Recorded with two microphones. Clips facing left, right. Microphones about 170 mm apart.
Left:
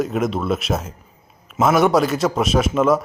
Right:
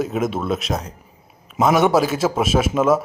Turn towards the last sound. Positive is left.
turn(degrees=-5)  # may be behind; listen again after turning